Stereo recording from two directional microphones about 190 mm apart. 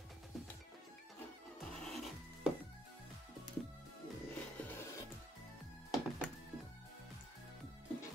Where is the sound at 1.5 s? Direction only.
Centre (ahead or behind).